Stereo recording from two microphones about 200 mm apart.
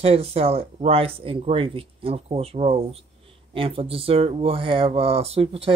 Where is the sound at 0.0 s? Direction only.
30° right (ahead or behind).